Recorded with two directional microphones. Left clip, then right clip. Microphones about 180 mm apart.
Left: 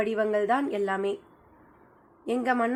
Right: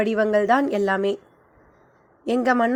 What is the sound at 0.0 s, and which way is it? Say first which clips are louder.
A woman's voice: right 6 dB; 40° right (ahead or behind).